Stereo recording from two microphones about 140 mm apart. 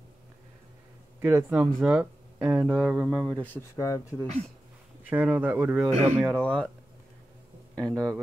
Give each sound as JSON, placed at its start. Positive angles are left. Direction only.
{"t": 1.2, "sound": "speech", "side_deg": -5}
{"t": 3.3, "sound": "speech", "side_deg": 15}
{"t": 5.1, "sound": "speech", "side_deg": -10}
{"t": 6.1, "sound": "speech", "side_deg": 5}
{"t": 7.7, "sound": "speech", "side_deg": 5}